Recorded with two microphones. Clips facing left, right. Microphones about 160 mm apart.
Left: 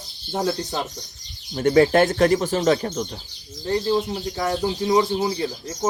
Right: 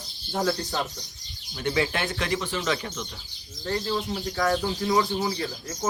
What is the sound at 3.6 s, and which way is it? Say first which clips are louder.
Speech: left 6 dB; 20° left (ahead or behind).